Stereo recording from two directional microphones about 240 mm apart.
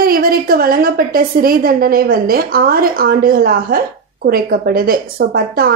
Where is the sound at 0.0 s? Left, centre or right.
Right.